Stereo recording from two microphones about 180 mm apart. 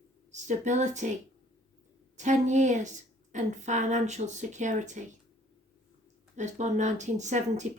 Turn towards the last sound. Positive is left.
turn(degrees=-40)  # may be behind; listen again after turning